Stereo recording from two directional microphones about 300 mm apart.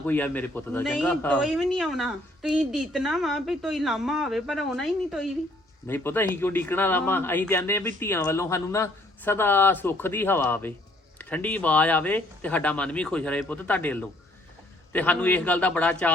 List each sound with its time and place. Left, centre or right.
0.0 s a man's voice: centre